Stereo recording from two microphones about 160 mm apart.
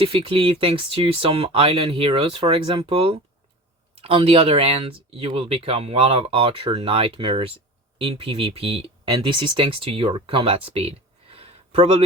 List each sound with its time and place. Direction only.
0.0 s speech: 35° right (ahead or behind)